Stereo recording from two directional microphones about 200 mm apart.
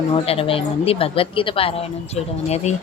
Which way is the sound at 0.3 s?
30° left (ahead or behind).